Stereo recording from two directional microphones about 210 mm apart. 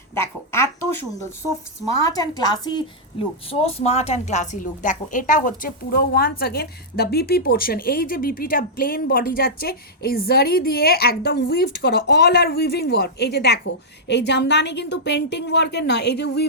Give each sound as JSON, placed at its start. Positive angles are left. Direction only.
{"t": 0.1, "sound": "speech", "side_deg": 10}
{"t": 2.0, "sound": "a woman's voice", "side_deg": 15}